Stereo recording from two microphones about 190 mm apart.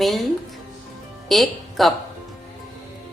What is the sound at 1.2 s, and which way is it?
Speech, centre (ahead or behind).